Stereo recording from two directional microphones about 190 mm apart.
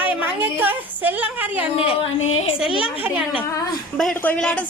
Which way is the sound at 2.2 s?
35° left (ahead or behind).